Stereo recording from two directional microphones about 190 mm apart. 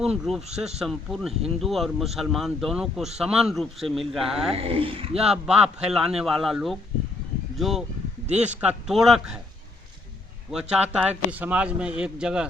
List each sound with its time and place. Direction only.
0.0 s a man's voice: centre (ahead or behind)
4.5 s speech: 30° right (ahead or behind)
5.1 s a man's voice: 5° right (ahead or behind)
10.5 s a man's voice: 5° right (ahead or behind)